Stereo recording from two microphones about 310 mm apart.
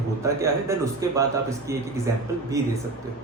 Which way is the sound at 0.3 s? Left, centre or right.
Centre.